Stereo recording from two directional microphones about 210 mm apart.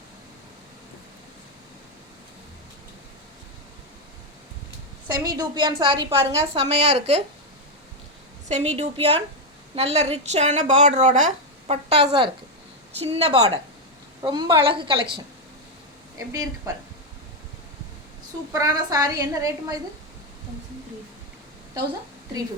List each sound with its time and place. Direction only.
5.0 s a woman's voice: 20° right (ahead or behind)
8.4 s a woman's voice: 30° right (ahead or behind)
14.2 s a woman's voice: 20° right (ahead or behind)
16.1 s a woman's voice: 15° right (ahead or behind)
18.5 s a woman's voice: 15° right (ahead or behind)